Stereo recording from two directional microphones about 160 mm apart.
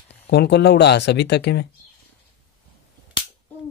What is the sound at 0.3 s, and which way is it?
Speech, 90° left.